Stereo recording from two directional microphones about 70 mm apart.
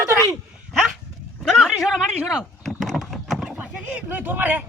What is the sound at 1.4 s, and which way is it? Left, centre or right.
Speech, centre.